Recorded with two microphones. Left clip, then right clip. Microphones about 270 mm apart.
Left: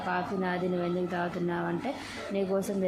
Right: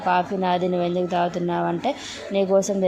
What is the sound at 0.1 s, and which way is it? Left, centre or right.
Speech, centre.